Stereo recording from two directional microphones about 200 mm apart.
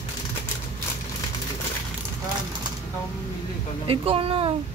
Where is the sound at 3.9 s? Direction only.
30° right (ahead or behind).